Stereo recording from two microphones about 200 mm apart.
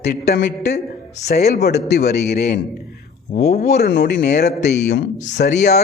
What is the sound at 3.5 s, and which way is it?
Speech, 35° left (ahead or behind).